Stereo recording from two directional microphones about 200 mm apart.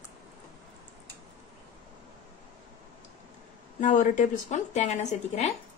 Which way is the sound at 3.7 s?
40° left (ahead or behind).